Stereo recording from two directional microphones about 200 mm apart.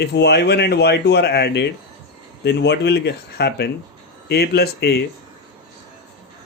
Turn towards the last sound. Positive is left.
turn(degrees=55)  # may be behind; listen again after turning